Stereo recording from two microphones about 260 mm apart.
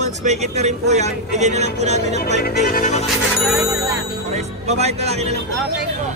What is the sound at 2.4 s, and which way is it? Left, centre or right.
Music, left.